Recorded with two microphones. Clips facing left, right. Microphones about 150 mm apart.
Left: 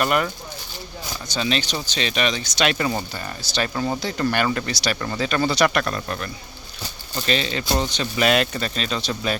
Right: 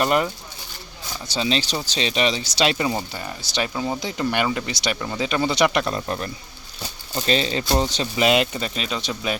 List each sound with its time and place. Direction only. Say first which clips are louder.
0.0 s speech: right 1 dB; 25° right (ahead or behind)
1.3 s speech: right 1 dB; 25° right (ahead or behind)
2.7 s speech: even; 15° right (ahead or behind)
3.8 s speech: left 2 dB; 5° right (ahead or behind)
4.0 s speech: left 1 dB; 15° right (ahead or behind); by 8.0 s 35° right (ahead or behind)
8.1 s speech: even; 20° right (ahead or behind)